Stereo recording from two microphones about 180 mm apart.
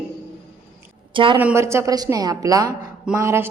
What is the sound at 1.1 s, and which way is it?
Speech, 30° right (ahead or behind).